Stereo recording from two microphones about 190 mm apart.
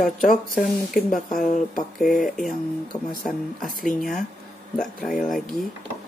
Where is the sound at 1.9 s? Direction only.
Centre (ahead or behind).